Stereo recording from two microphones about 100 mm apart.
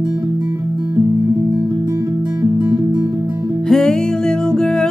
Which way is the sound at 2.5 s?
15° right (ahead or behind).